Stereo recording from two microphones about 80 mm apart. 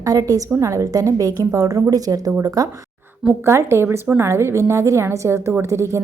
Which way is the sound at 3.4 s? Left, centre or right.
Right.